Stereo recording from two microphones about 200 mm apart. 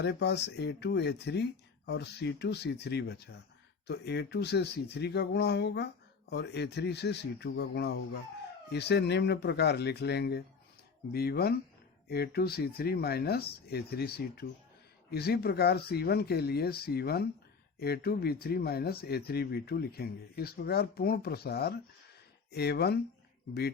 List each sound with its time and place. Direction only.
0.0 s speech: 55° left (ahead or behind)